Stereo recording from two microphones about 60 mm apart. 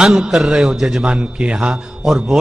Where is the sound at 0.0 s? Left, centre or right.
Centre.